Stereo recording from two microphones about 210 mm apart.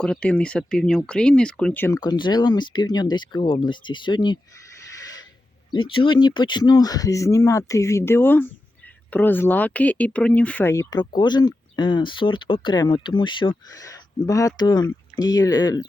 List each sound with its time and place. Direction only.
0.0 s speech: 5° left (ahead or behind); by 4.4 s 20° left (ahead or behind)
4.9 s a sound: 15° left (ahead or behind)
5.7 s speech: 25° left (ahead or behind)